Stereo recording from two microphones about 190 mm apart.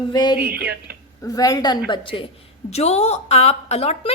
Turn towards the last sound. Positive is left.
turn(degrees=35)  # may be behind; listen again after turning